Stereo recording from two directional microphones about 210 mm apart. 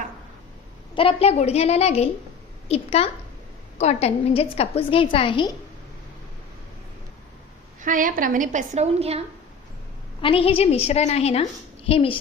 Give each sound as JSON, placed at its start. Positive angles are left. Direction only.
{"t": 0.9, "sound": "a woman's voice", "side_deg": 25}
{"t": 7.8, "sound": "a woman's voice", "side_deg": -40}
{"t": 10.2, "sound": "a woman's voice", "side_deg": 25}